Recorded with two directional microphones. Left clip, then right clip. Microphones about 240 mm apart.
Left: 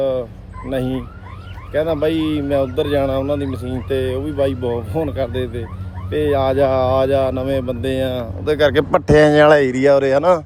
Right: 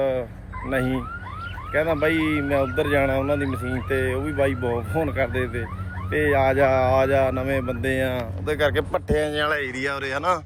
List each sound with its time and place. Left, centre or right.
0.0 s a sound: centre
0.7 s speech: centre
8.4 s speech: left